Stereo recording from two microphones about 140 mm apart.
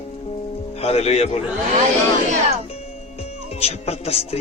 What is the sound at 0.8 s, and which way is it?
Speech, 50° left (ahead or behind).